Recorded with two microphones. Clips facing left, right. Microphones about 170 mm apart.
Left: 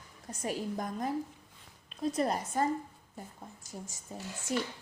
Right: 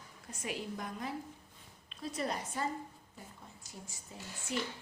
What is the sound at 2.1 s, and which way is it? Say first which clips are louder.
Speech: left 5 dB; 45° left (ahead or behind).